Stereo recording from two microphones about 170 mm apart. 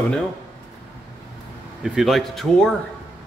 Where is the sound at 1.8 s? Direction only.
Centre (ahead or behind).